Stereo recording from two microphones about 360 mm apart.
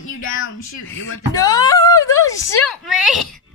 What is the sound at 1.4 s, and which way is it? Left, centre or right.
A woman's voice, centre.